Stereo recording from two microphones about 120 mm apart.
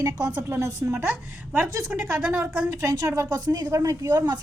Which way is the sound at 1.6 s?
10° right (ahead or behind).